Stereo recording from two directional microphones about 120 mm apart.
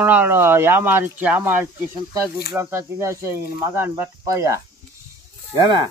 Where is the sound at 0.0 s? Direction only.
15° right (ahead or behind).